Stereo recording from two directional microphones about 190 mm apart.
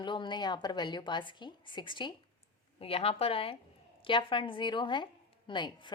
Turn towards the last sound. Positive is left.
turn(degrees=25)  # may be behind; listen again after turning